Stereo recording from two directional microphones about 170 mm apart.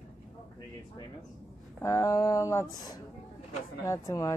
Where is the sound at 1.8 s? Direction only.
20° left (ahead or behind).